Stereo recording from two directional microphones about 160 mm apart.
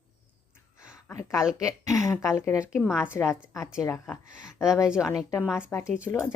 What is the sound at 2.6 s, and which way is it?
Speech, 5° right (ahead or behind).